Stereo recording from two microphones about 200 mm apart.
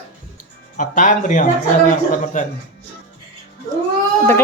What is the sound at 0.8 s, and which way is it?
Speech, 40° left (ahead or behind).